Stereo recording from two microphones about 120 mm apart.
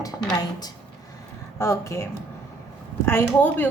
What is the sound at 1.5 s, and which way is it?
Speech, 25° left (ahead or behind).